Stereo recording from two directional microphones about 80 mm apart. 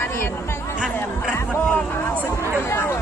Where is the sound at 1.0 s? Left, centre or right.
Left.